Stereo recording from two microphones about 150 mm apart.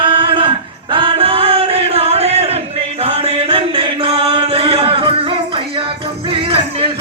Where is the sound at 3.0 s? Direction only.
40° right (ahead or behind).